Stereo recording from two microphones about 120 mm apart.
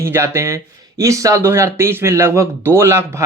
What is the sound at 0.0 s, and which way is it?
Speech, 20° right (ahead or behind).